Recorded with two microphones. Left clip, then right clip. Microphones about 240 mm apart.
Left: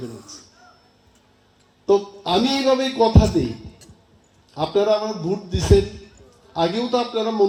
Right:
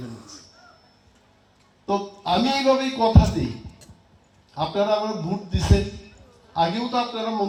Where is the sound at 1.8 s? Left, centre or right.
Left.